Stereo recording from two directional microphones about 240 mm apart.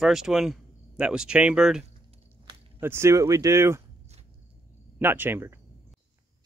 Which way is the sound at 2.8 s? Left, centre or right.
Centre.